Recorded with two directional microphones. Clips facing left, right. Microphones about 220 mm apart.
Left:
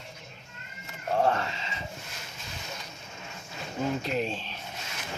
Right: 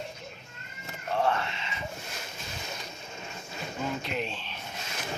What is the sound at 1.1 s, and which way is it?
Cat, 40° left (ahead or behind).